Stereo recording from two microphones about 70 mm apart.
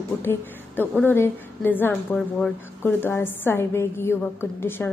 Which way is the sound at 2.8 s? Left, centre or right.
Left.